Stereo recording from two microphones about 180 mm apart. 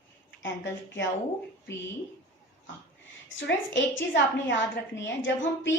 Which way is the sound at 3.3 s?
90° left.